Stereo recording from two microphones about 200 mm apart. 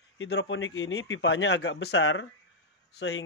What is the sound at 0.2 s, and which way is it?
Speech, 65° left (ahead or behind).